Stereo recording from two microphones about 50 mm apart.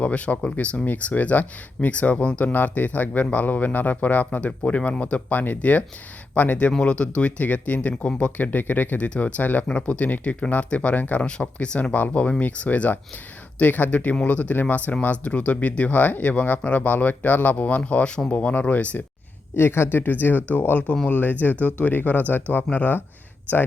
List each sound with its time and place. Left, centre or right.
0.0 s speech: left
2.4 s speech: left
8.4 s speech: left
9.6 s speech: centre
19.5 s speech: left